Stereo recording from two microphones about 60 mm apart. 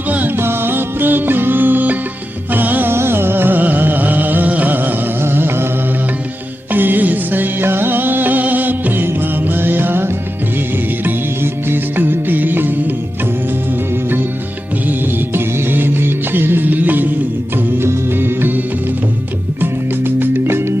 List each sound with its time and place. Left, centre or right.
0.3 s music: right
2.9 s music: right
6.7 s music: right
11.7 s music: right
14.8 s music: right
20.1 s music: right